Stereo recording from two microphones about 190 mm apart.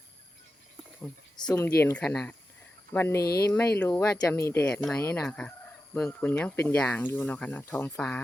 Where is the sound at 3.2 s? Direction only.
55° left (ahead or behind).